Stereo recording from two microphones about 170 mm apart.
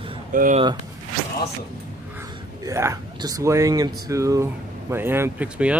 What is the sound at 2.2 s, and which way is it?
Speech, 15° right (ahead or behind).